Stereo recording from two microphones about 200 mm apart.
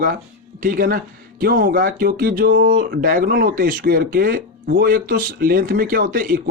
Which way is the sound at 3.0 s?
50° right (ahead or behind).